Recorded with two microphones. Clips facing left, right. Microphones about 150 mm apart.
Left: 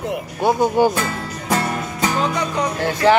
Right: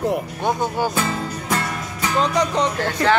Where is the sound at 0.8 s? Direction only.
15° left (ahead or behind).